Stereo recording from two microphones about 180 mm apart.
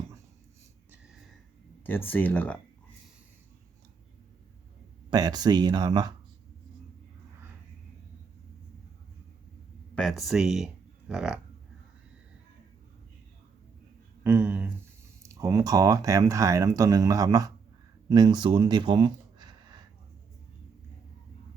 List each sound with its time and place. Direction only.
1.8 s speech: 10° left (ahead or behind)
5.1 s speech: 20° right (ahead or behind)
9.9 s speech: centre (ahead or behind)
14.3 s speech: 10° right (ahead or behind)